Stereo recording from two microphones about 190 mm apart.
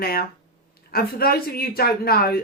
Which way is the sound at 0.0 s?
50° left (ahead or behind).